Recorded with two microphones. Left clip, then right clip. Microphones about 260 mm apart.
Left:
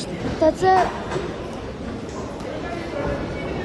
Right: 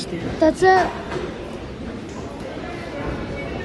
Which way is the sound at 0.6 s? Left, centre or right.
Right.